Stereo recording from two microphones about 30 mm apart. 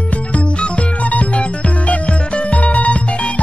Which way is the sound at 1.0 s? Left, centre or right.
Left.